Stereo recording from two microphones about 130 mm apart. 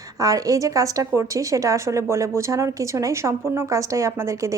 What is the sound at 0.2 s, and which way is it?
A woman's voice, 25° right (ahead or behind).